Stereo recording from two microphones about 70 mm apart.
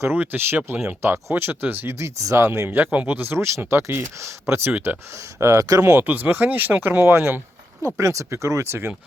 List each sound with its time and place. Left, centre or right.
0.0 s speech: right
2.0 s speech: right
2.6 s speech: right
5.1 s speech: right
6.0 s speech: right